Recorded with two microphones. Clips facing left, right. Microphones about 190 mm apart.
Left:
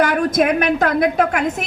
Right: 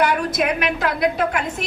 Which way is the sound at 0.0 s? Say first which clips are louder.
Left 4 dB; 50° left (ahead or behind).